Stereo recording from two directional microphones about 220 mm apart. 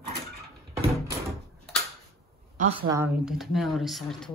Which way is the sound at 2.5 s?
30° right (ahead or behind).